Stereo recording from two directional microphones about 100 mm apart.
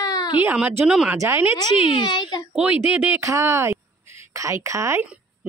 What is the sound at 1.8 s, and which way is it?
Speech, 55° left (ahead or behind).